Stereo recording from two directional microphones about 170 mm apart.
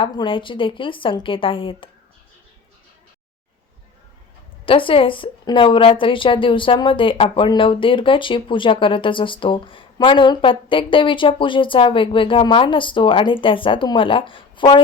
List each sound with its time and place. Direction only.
0.0 s a woman's voice: 30° left (ahead or behind)
4.6 s a woman's voice: 30° left (ahead or behind)